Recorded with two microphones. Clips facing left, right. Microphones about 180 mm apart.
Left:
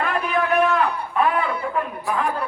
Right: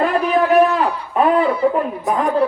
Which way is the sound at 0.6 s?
30° right (ahead or behind).